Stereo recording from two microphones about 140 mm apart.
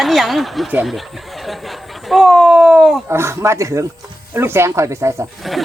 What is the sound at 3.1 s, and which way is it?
Speech, 20° right (ahead or behind).